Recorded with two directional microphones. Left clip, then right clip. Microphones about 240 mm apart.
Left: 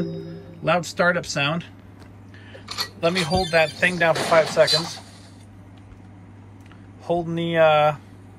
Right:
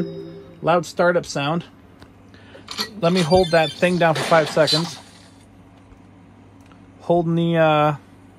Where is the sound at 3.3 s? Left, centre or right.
Right.